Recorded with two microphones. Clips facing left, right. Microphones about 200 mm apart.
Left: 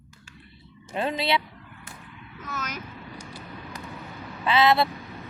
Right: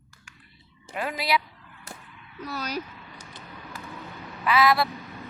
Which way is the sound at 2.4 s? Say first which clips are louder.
Right 4 dB; 35° right (ahead or behind).